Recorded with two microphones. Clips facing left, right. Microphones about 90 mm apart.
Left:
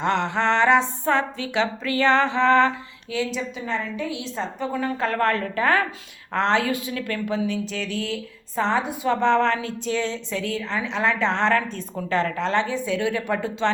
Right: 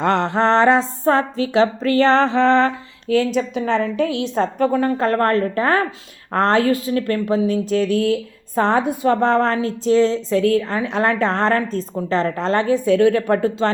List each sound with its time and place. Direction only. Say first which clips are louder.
0.0 s speech: right 5 dB; 40° right (ahead or behind)
3.7 s a woman's voice: right 8 dB; 75° right (ahead or behind); by 13.7 s 40° right (ahead or behind)